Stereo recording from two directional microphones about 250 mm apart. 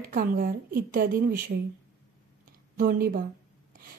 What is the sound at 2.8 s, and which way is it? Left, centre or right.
Speech, right.